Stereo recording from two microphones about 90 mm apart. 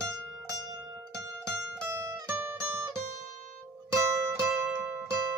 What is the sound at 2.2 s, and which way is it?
Music, 25° right (ahead or behind).